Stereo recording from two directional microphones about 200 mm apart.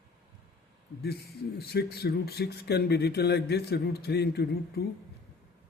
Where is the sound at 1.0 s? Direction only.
55° left (ahead or behind).